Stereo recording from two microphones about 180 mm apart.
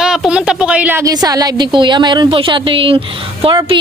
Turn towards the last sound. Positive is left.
turn(degrees=-25)  # may be behind; listen again after turning